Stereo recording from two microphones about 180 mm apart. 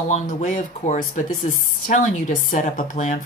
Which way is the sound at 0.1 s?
45° left (ahead or behind).